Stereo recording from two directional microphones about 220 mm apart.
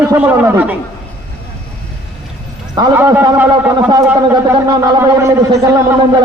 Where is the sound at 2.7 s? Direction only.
15° right (ahead or behind).